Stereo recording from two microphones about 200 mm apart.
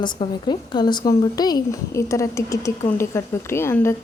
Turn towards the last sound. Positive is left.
turn(degrees=10)  # may be behind; listen again after turning